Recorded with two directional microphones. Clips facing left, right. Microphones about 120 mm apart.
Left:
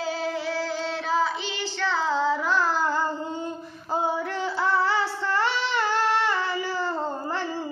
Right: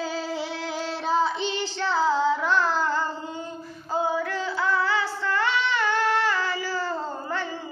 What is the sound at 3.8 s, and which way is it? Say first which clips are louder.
Music: right 1 dB; 25° left (ahead or behind).